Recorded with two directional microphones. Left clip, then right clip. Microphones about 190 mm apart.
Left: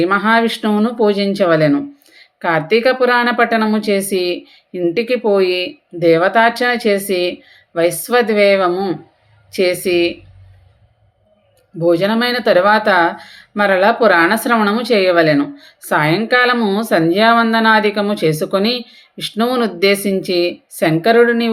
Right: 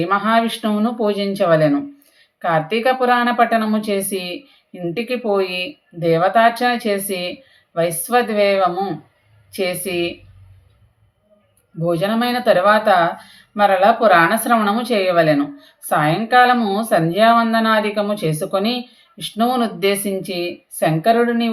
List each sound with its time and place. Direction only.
0.0 s speech: 30° left (ahead or behind)
11.8 s speech: 35° left (ahead or behind)